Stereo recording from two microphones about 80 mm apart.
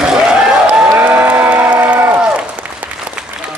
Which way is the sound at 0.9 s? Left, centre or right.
Right.